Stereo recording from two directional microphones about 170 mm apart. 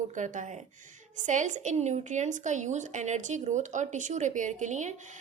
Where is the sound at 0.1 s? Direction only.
50° right (ahead or behind).